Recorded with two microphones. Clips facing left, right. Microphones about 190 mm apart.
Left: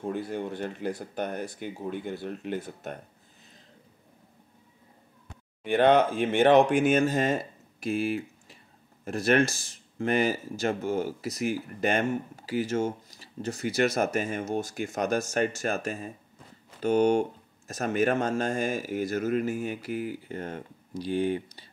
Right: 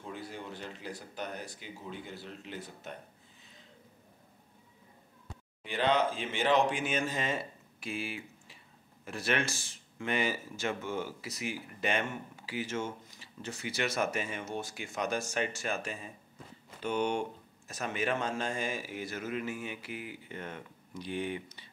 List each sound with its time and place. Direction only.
0.0 s speech: 55° left (ahead or behind)
5.6 s speech: 55° left (ahead or behind); by 21.6 s 35° left (ahead or behind)